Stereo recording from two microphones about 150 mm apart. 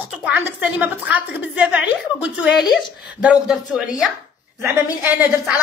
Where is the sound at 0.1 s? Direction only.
10° right (ahead or behind).